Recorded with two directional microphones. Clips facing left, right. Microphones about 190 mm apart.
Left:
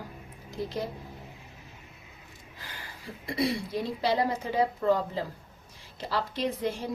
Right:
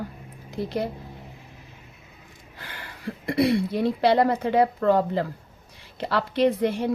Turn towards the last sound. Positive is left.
turn(degrees=-65)  # may be behind; listen again after turning